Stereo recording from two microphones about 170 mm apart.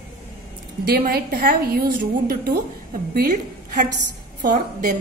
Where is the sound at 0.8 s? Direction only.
65° right (ahead or behind).